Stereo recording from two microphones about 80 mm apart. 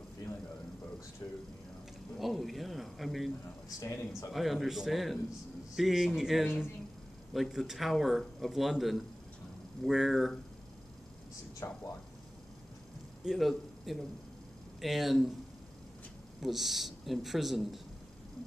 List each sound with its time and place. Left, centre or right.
1.2 s speech: left
2.1 s a man's voice: centre
3.6 s speech: left
4.3 s a man's voice: centre
11.6 s speech: left
13.2 s a man's voice: centre
16.3 s a man's voice: centre